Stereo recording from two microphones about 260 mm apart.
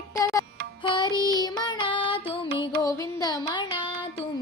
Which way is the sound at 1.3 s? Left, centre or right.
Centre.